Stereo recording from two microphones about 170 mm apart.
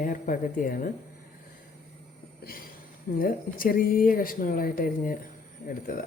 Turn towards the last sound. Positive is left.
turn(degrees=55)  # may be behind; listen again after turning